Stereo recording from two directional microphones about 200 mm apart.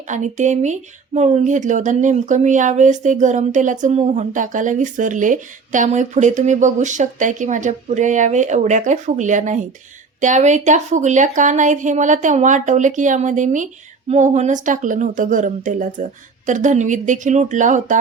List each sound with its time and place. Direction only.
0.1 s speech: 35° right (ahead or behind)